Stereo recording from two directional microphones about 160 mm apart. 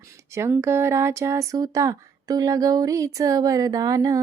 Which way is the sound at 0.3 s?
15° right (ahead or behind).